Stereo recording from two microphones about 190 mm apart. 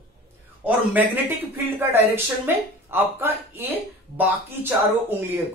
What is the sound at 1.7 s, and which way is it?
Speech, 10° right (ahead or behind).